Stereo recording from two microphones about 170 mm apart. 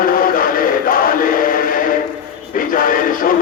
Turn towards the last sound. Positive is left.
turn(degrees=55)  # may be behind; listen again after turning